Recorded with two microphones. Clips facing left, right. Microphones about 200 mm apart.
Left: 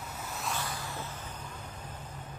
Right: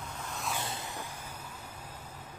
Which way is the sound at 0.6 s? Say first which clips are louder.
Left 1 dB; 20° right (ahead or behind).